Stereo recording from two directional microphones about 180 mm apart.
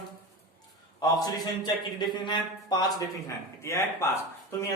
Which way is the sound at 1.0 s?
20° left (ahead or behind).